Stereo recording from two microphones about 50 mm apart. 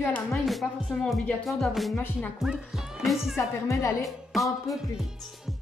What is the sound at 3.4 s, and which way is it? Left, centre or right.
Speech, left.